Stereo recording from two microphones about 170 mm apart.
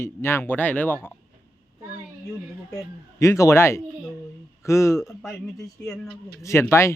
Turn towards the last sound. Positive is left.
turn(degrees=15)  # may be behind; listen again after turning